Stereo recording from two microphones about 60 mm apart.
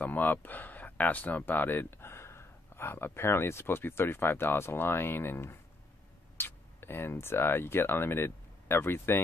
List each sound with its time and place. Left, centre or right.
0.0 s speech: left